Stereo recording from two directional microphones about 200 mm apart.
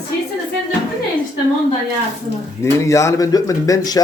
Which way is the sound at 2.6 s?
15° left (ahead or behind).